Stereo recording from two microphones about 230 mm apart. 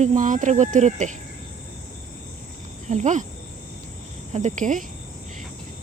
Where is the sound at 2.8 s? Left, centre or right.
Right.